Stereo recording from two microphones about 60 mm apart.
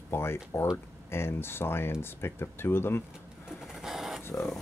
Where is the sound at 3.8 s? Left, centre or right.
Centre.